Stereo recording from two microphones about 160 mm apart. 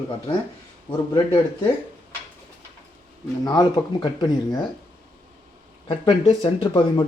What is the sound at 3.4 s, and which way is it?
Speech, 25° left (ahead or behind).